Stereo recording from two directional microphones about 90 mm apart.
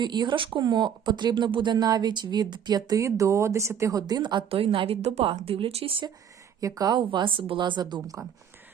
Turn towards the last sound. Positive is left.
turn(degrees=-55)  # may be behind; listen again after turning